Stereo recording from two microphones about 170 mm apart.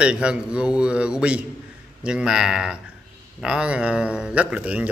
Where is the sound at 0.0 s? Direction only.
5° right (ahead or behind).